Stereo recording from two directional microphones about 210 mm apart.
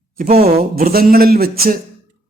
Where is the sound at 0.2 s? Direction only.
45° right (ahead or behind).